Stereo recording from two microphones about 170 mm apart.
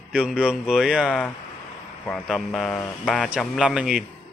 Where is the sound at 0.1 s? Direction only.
5° right (ahead or behind).